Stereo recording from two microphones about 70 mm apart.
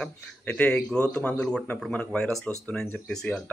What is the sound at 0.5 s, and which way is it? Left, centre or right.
A man's voice, centre.